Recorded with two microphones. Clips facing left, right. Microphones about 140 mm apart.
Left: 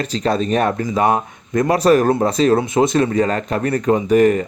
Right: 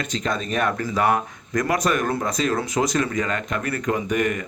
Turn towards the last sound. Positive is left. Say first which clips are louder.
# left 10 dB
turn(degrees=35)  # may be behind; listen again after turning